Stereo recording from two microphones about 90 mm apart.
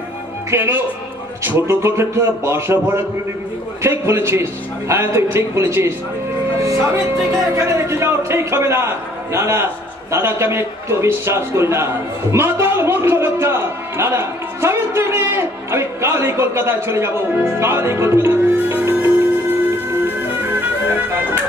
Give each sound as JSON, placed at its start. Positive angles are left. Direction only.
{"t": 0.5, "sound": "a man's voice", "side_deg": -25}
{"t": 19.9, "sound": "music", "side_deg": -20}